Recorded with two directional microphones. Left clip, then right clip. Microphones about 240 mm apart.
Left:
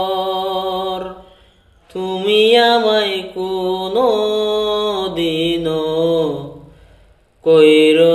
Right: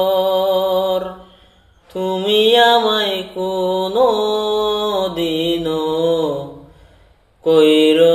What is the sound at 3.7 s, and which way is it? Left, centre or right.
Mantra, left.